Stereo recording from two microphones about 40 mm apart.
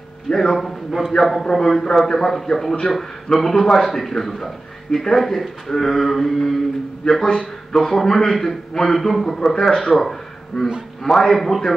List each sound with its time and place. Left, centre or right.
0.3 s a man's voice: centre
0.6 s a man's voice: centre
10.5 s a man's voice: centre
11.3 s speech: centre